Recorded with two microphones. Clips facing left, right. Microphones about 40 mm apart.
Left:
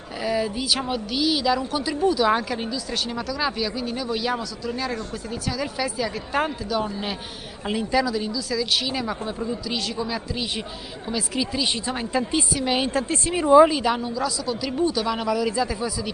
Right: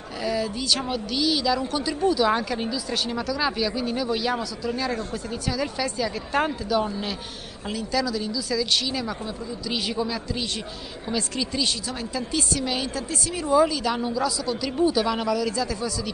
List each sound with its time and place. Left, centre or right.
0.2 s speech: centre
7.6 s speech: left
8.3 s speech: centre
8.8 s speech: centre
9.7 s speech: centre
10.0 s speech: centre
11.9 s speech: left
12.8 s speech: left
14.0 s speech: centre